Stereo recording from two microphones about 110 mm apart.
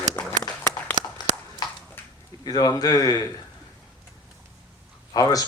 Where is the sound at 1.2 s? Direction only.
40° left (ahead or behind).